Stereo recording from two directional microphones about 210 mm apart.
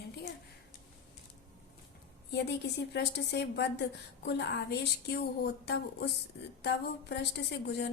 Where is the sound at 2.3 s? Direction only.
55° left (ahead or behind).